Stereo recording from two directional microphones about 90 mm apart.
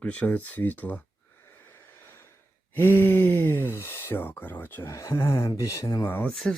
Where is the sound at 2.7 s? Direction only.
20° left (ahead or behind); by 5.9 s 40° left (ahead or behind).